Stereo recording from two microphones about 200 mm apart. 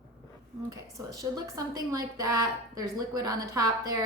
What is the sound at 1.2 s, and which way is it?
A woman's voice, 15° right (ahead or behind).